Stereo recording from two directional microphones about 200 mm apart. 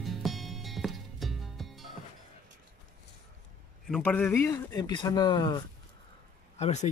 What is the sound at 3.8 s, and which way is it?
Speech, 5° left (ahead or behind).